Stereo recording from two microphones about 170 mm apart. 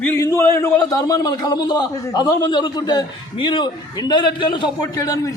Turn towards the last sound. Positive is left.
turn(degrees=20)  # may be behind; listen again after turning